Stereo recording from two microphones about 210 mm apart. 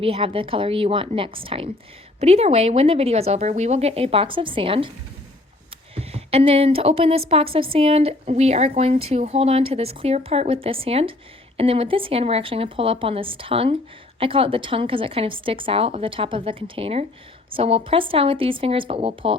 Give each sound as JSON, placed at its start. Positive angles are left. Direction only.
{"t": 0.0, "sound": "speech", "side_deg": -25}
{"t": 5.9, "sound": "speech", "side_deg": -30}